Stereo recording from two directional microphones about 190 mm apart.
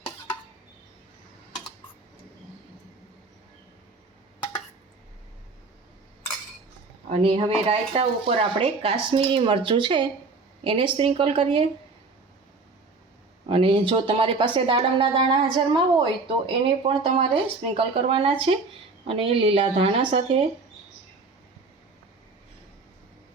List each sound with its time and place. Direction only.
7.1 s speech: 30° right (ahead or behind)
13.5 s speech: 30° right (ahead or behind)